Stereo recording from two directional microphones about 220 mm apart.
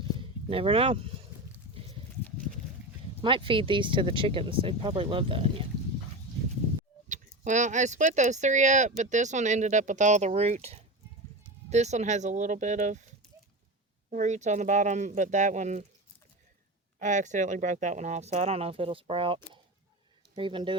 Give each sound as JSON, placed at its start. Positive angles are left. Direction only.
{"t": 0.0, "sound": "a sound", "side_deg": -25}
{"t": 3.2, "sound": "speech", "side_deg": -25}
{"t": 7.1, "sound": "speech", "side_deg": -35}
{"t": 14.1, "sound": "speech", "side_deg": -35}
{"t": 17.0, "sound": "speech", "side_deg": -35}